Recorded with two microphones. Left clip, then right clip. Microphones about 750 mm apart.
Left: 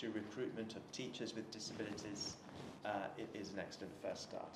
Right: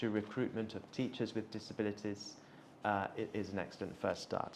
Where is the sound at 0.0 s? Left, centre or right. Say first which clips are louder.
Right 7 dB; right.